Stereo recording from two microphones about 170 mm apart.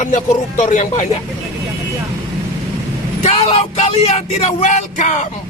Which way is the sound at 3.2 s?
35° left (ahead or behind).